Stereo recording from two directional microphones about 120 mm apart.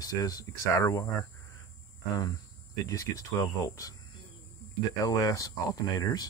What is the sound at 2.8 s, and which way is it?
Speech, 25° left (ahead or behind).